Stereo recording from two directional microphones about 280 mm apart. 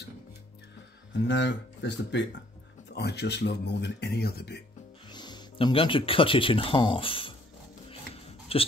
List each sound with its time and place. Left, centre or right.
1.2 s speech: left
5.1 s speech: centre
8.5 s speech: centre